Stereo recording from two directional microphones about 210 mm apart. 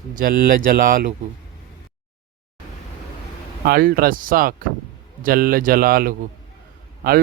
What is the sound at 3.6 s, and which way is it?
Speech, 45° right (ahead or behind).